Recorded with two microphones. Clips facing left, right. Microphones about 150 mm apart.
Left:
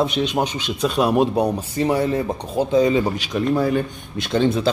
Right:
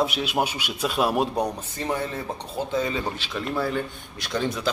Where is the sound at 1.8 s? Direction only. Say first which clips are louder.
Left 8 dB; 10° left (ahead or behind).